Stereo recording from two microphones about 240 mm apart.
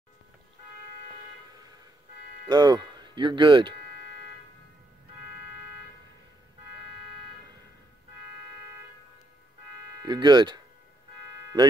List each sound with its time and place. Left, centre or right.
2.4 s speech: centre
10.0 s speech: centre